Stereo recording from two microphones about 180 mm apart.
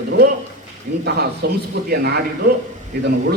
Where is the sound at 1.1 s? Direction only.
65° right (ahead or behind).